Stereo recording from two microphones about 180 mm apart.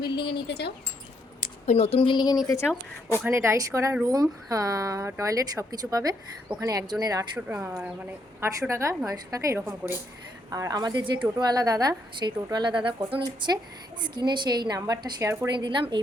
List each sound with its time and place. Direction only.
0.3 s speech: 70° left (ahead or behind)
1.4 s speech: 40° left (ahead or behind); by 2.4 s 25° left (ahead or behind)
3.2 s a woman's voice: 15° right (ahead or behind)
15.6 s speech: 25° right (ahead or behind)